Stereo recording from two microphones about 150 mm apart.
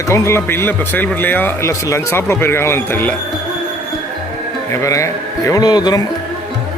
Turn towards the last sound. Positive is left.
turn(degrees=25)  # may be behind; listen again after turning